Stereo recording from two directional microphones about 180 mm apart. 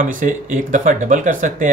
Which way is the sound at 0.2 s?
45° right (ahead or behind).